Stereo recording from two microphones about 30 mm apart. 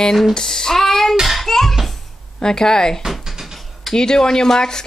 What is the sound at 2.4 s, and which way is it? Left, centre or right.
Speech, left.